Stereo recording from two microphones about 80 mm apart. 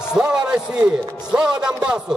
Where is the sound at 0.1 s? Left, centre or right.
Centre.